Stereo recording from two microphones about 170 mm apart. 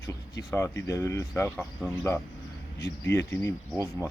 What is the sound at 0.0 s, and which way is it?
Speech, 20° left (ahead or behind).